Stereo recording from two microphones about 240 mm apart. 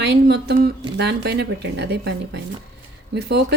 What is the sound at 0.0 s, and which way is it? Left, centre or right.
Speech, right.